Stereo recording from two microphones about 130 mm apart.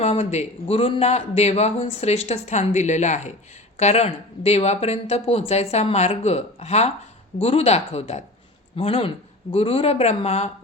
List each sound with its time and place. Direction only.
0.0 s speech: 55° left (ahead or behind)